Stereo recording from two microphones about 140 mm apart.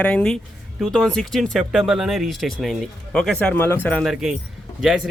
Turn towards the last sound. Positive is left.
turn(degrees=0)  # may be behind; listen again after turning